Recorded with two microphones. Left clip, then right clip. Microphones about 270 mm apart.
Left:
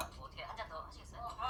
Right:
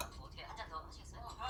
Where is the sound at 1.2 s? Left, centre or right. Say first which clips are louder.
Left 5 dB; left.